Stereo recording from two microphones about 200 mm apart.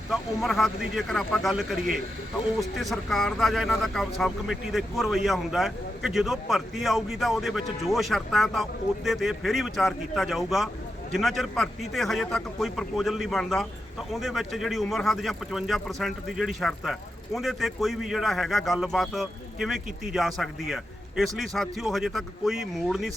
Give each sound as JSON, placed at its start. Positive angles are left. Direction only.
{"t": 0.1, "sound": "speech", "side_deg": 0}